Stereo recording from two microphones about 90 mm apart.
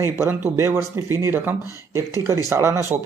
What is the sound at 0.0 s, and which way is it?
Speech, 30° right (ahead or behind).